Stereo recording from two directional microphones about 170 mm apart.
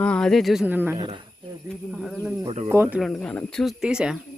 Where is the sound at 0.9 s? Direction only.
30° right (ahead or behind).